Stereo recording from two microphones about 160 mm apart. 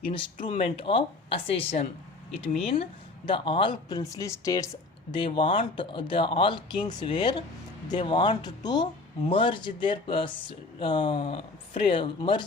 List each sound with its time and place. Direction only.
0.4 s speech: 35° left (ahead or behind); by 4.7 s 20° left (ahead or behind)
5.1 s speech: 35° left (ahead or behind)